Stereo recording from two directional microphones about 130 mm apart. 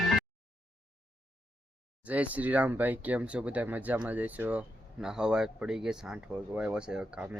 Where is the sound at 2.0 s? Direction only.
10° right (ahead or behind).